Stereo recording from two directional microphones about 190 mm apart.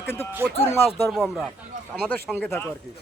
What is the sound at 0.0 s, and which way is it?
Speech, 15° left (ahead or behind).